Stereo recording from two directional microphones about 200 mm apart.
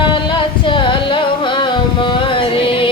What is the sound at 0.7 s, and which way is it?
Music, 25° left (ahead or behind).